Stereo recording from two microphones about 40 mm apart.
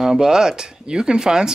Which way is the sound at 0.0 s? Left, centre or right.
Centre.